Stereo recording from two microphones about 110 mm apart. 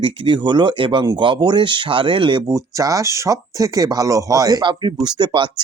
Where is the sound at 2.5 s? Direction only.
30° right (ahead or behind).